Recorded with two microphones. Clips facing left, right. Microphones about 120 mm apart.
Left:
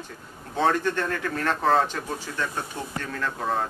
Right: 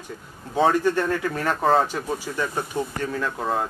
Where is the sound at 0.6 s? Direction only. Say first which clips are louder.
Right 4 dB; 10° right (ahead or behind).